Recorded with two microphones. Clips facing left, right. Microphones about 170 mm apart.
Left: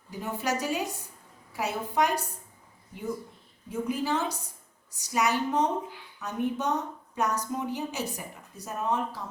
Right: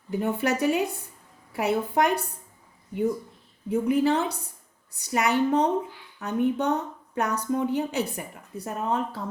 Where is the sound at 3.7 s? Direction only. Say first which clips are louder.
Right 7 dB; 60° right (ahead or behind).